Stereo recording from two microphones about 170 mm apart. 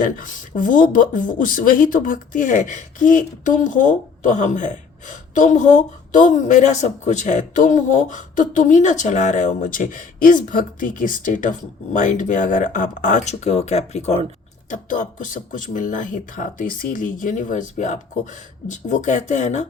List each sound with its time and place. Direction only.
0.0 s speech: 55° left (ahead or behind)
14.7 s speech: 50° left (ahead or behind)